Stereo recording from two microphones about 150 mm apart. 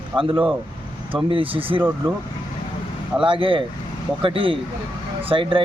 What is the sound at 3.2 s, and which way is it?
Speech, 35° right (ahead or behind).